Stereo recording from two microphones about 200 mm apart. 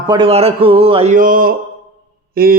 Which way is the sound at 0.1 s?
25° right (ahead or behind).